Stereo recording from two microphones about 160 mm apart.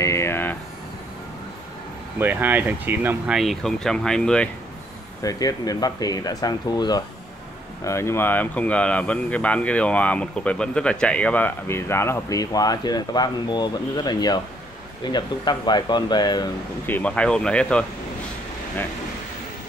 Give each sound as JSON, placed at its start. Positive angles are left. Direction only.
{"t": 0.0, "sound": "a sound", "side_deg": 15}
{"t": 2.1, "sound": "speech", "side_deg": -10}
{"t": 3.3, "sound": "speech", "side_deg": 0}
{"t": 5.2, "sound": "speech", "side_deg": 25}
{"t": 16.8, "sound": "speech", "side_deg": 10}